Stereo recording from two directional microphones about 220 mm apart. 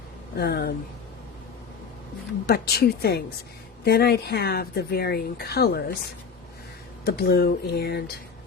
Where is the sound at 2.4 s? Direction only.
45° left (ahead or behind).